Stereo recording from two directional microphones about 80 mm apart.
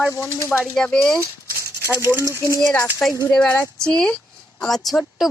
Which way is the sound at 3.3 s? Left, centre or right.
Centre.